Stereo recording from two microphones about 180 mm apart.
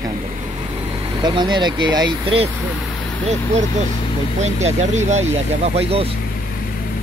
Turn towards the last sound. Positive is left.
turn(degrees=-35)  # may be behind; listen again after turning